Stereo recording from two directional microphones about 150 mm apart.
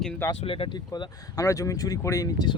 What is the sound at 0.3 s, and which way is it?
Speech, 35° left (ahead or behind).